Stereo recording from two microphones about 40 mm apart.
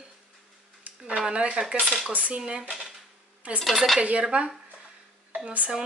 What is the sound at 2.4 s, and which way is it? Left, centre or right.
Speech, centre.